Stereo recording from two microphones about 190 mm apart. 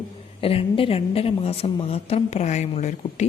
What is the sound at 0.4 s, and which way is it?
Speech, 30° left (ahead or behind).